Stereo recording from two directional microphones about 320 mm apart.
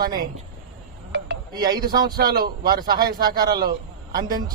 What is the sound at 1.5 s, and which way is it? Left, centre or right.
Speech, centre.